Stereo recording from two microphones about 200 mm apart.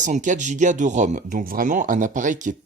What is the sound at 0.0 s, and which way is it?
Speech, 40° right (ahead or behind).